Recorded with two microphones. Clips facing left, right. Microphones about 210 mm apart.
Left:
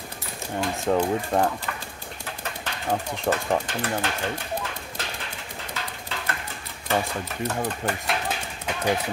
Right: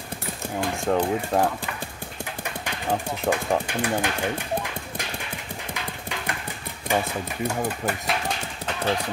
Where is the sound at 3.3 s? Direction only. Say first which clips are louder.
Even; centre (ahead or behind).